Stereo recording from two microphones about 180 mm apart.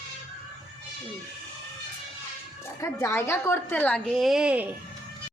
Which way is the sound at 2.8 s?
15° left (ahead or behind).